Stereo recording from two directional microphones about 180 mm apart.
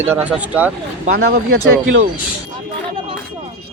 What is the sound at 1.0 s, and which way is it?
Speech, 55° right (ahead or behind).